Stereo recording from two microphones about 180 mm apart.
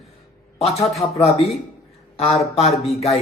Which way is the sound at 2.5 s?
35° left (ahead or behind).